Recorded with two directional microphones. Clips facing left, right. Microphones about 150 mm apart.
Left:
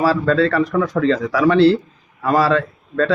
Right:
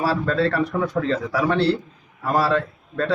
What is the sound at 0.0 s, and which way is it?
A man's voice, 90° left.